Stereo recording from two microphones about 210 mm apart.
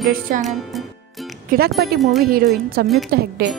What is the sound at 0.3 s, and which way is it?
Speech, 40° right (ahead or behind).